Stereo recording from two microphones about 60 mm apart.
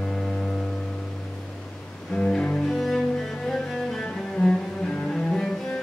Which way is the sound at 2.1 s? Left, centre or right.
Centre.